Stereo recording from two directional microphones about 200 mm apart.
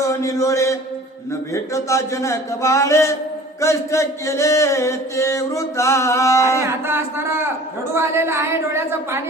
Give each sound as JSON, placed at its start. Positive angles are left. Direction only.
{"t": 0.0, "sound": "a man's voice", "side_deg": 15}
{"t": 1.3, "sound": "chant", "side_deg": 15}
{"t": 6.6, "sound": "speech", "side_deg": -10}